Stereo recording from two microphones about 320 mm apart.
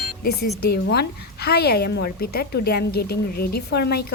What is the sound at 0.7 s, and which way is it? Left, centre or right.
A woman's voice, left.